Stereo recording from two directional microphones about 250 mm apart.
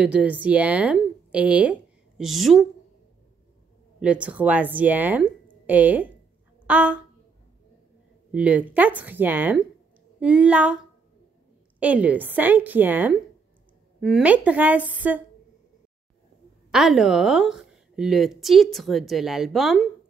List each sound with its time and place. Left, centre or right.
0.0 s speech: centre
4.0 s speech: centre
8.3 s a woman's voice: centre
16.7 s a woman's voice: centre